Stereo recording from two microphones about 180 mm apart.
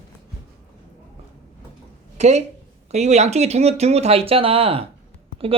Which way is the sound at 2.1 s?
40° right (ahead or behind).